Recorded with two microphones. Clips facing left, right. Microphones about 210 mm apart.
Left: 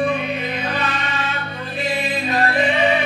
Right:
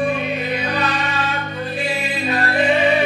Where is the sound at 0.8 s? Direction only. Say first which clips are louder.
Right 3 dB; 40° right (ahead or behind).